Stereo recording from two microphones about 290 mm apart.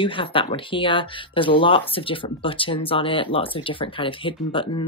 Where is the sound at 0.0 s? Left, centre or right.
Centre.